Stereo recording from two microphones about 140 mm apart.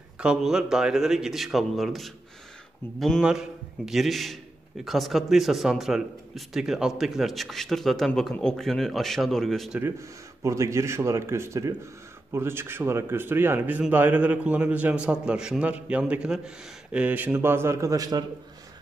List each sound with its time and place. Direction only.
0.2 s speech: 5° right (ahead or behind)
9.8 s a man's voice: 20° right (ahead or behind)